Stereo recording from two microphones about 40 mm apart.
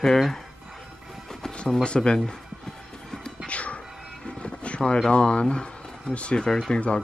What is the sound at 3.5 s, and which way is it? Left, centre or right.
Music, left.